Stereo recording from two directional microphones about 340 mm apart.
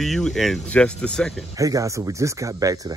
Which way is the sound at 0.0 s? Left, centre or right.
Centre.